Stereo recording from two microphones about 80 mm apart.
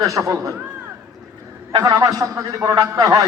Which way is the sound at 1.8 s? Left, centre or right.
Right.